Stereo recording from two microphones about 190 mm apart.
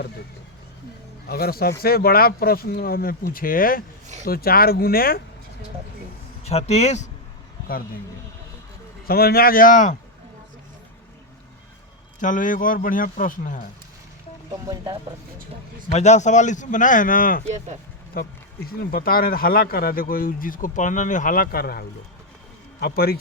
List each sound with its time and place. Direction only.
1.3 s speech: 55° left (ahead or behind)
6.4 s speech: 35° left (ahead or behind)
9.0 s speech: 55° left (ahead or behind)
12.2 s speech: 45° left (ahead or behind)
15.9 s speech: 35° left (ahead or behind); by 23.1 s 55° left (ahead or behind)